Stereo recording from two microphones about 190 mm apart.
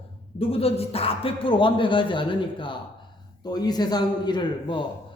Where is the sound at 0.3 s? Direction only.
30° left (ahead or behind).